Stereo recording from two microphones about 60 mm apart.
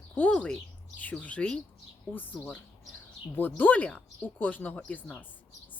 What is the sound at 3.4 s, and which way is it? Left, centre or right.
A woman's voice, left.